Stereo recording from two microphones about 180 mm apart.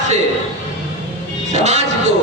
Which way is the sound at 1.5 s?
40° right (ahead or behind).